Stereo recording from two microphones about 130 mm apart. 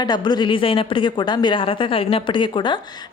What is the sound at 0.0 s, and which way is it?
A woman's voice, 35° left (ahead or behind).